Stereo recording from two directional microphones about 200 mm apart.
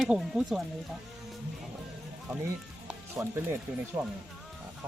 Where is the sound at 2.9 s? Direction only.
15° right (ahead or behind).